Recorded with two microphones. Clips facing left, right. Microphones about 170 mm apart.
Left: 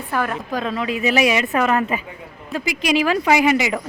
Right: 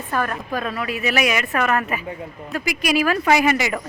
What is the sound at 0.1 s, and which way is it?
A woman's voice, 15° left (ahead or behind).